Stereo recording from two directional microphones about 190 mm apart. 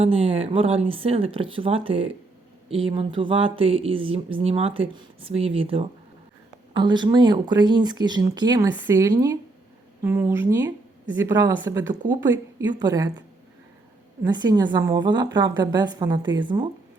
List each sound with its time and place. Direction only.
0.0 s a woman's voice: 30° right (ahead or behind)
14.3 s speech: 20° right (ahead or behind)